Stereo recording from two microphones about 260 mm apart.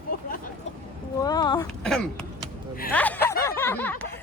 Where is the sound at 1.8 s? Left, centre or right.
Centre.